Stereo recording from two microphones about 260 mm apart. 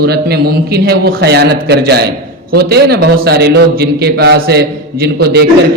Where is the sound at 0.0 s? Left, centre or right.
Right.